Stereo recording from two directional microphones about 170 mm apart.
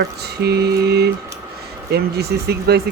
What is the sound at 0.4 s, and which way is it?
Speech, 70° right (ahead or behind).